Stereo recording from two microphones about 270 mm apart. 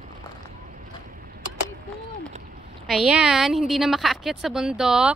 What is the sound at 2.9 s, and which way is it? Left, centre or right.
A woman's voice, centre.